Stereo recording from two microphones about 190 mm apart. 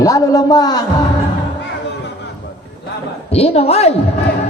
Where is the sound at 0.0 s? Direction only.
20° left (ahead or behind).